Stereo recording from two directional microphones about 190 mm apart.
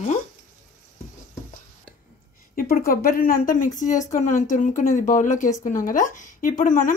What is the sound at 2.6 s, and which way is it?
Speech, 50° left (ahead or behind).